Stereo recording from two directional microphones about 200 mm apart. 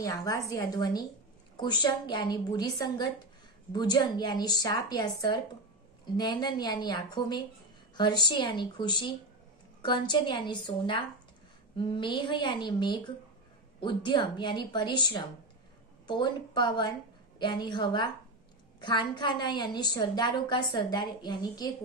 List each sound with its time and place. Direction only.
0.0 s a woman's voice: 15° left (ahead or behind)